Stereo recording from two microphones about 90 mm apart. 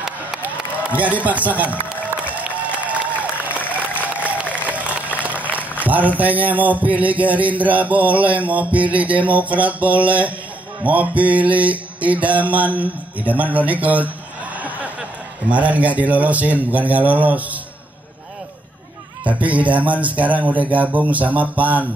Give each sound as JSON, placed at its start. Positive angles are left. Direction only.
{"t": 0.4, "sound": "music", "side_deg": -15}
{"t": 4.0, "sound": "a sound", "side_deg": -15}
{"t": 4.6, "sound": "speech", "side_deg": -15}
{"t": 10.8, "sound": "mantra", "side_deg": -15}
{"t": 14.6, "sound": "a sound", "side_deg": -15}
{"t": 15.5, "sound": "mantra", "side_deg": -15}
{"t": 19.2, "sound": "mantra", "side_deg": -15}